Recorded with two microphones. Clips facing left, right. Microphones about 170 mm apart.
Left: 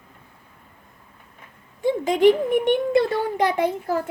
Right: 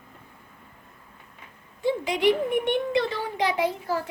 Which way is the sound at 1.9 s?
45° left (ahead or behind).